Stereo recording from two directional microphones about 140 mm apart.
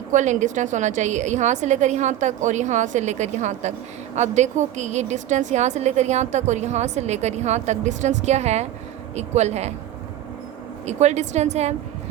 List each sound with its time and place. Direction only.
0.1 s a woman's voice: 60° right (ahead or behind)
10.8 s a woman's voice: 55° right (ahead or behind)